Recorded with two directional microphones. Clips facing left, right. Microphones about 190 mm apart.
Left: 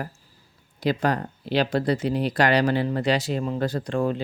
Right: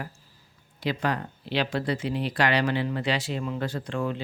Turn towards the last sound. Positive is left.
turn(degrees=40)  # may be behind; listen again after turning